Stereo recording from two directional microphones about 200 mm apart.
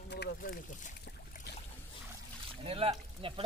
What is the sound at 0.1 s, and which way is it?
Speech, 50° left (ahead or behind).